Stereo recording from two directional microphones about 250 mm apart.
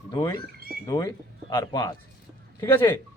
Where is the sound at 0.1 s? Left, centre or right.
Centre.